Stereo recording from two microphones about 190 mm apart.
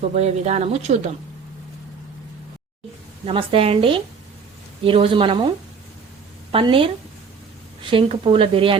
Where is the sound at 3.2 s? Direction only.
30° right (ahead or behind).